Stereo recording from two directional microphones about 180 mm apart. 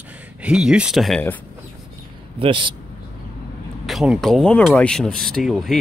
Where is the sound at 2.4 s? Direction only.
30° right (ahead or behind).